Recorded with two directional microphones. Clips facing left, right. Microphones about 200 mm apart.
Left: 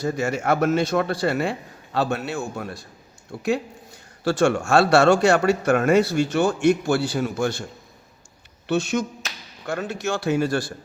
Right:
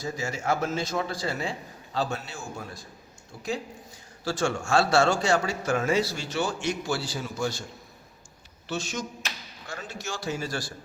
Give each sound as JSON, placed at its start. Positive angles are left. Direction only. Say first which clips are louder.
{"t": 0.0, "sound": "speech", "louder": "left 7 dB", "side_deg": 65}
{"t": 8.6, "sound": "speech", "louder": "left 10 dB", "side_deg": 60}